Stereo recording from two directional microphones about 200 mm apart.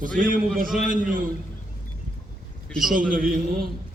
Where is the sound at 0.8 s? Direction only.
40° right (ahead or behind).